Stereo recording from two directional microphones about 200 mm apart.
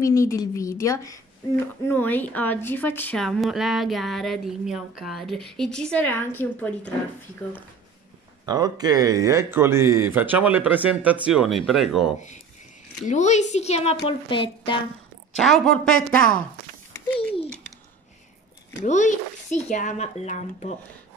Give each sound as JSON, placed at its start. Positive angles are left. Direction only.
{"t": 0.0, "sound": "a woman's voice", "side_deg": 15}
{"t": 8.5, "sound": "speech", "side_deg": -20}
{"t": 13.0, "sound": "speech", "side_deg": 35}
{"t": 15.4, "sound": "speech", "side_deg": 0}
{"t": 16.9, "sound": "a sound", "side_deg": 5}
{"t": 18.9, "sound": "speech", "side_deg": 35}